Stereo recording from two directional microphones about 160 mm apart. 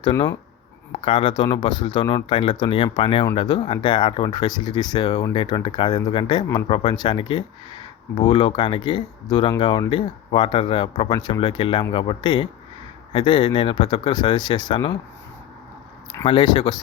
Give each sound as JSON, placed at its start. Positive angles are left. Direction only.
{"t": 0.0, "sound": "speech", "side_deg": 25}
{"t": 16.2, "sound": "speech", "side_deg": 30}